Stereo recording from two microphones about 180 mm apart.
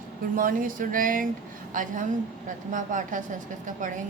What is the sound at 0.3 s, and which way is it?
A woman's voice, 50° right (ahead or behind).